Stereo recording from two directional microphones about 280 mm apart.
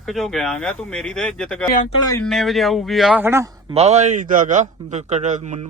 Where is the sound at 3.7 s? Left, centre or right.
Right.